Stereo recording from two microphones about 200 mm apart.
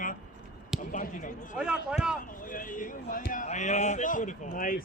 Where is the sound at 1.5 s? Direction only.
5° right (ahead or behind).